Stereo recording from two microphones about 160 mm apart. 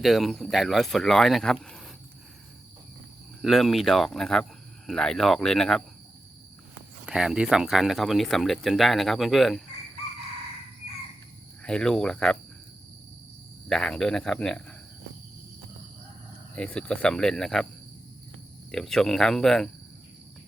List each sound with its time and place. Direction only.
0.0 s speech: centre (ahead or behind)
3.4 s speech: centre (ahead or behind)
7.0 s speech: 5° right (ahead or behind)
11.6 s speech: 5° left (ahead or behind)
13.7 s speech: 5° left (ahead or behind)
16.6 s speech: 5° left (ahead or behind)
18.7 s speech: 5° left (ahead or behind)